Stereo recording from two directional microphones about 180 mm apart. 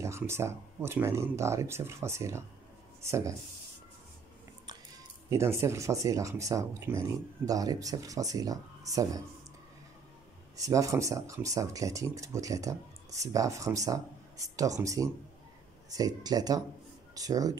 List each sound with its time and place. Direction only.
0.0 s speech: 15° right (ahead or behind)
5.3 s speech: 15° right (ahead or behind)
10.6 s speech: 20° right (ahead or behind)
16.2 s speech: 20° right (ahead or behind)